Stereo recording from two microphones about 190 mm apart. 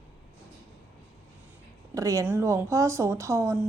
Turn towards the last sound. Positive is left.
turn(degrees=-15)  # may be behind; listen again after turning